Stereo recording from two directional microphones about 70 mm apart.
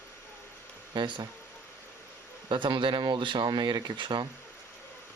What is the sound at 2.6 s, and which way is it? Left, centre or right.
Speech, right.